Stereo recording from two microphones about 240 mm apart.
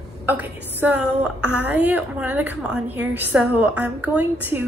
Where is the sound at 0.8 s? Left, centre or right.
Centre.